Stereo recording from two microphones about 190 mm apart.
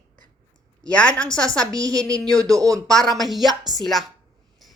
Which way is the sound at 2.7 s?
Centre (ahead or behind).